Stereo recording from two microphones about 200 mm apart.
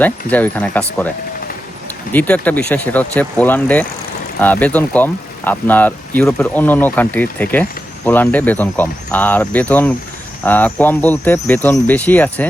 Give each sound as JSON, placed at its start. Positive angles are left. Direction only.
{"t": 0.0, "sound": "speech", "side_deg": 10}
{"t": 2.1, "sound": "speech", "side_deg": 5}